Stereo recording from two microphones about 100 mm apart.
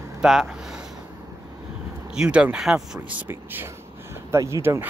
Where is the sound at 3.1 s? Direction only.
20° right (ahead or behind).